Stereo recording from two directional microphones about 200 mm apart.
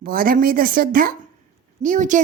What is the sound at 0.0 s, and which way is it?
A woman's voice, 45° right (ahead or behind).